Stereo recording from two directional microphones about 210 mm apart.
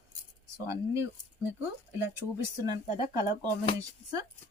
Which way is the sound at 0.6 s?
15° right (ahead or behind).